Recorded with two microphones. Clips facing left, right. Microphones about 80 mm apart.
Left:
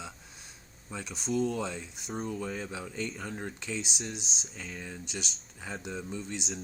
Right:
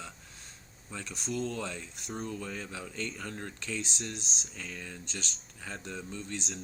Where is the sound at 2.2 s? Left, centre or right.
Centre.